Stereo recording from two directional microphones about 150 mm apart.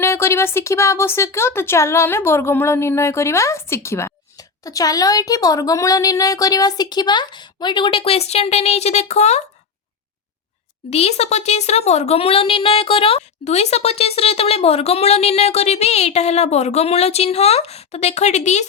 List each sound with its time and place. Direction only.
0.0 s speech: 15° left (ahead or behind); by 9.4 s 45° left (ahead or behind)
10.8 s speech: 45° left (ahead or behind)